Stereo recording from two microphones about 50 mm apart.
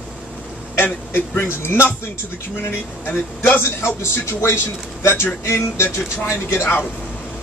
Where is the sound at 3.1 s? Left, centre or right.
Left.